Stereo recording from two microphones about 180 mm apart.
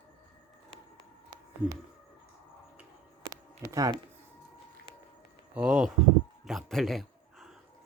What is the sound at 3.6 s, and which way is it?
Speech, 20° right (ahead or behind).